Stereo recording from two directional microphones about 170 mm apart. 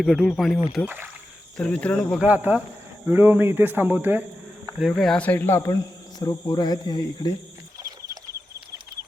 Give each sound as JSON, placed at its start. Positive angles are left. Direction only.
{"t": 0.0, "sound": "speech", "side_deg": 0}
{"t": 0.9, "sound": "speech", "side_deg": -10}
{"t": 1.5, "sound": "cricket", "side_deg": 5}
{"t": 2.2, "sound": "speech", "side_deg": -10}
{"t": 4.8, "sound": "speech", "side_deg": 0}
{"t": 7.8, "sound": "a sound", "side_deg": -20}